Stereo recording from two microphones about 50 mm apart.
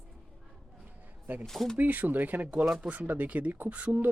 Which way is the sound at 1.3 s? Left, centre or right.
Right.